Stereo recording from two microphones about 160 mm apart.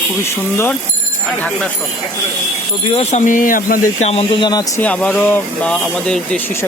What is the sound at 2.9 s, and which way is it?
Speech, 50° left (ahead or behind).